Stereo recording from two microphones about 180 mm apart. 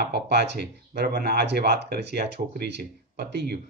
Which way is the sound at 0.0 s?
65° right (ahead or behind).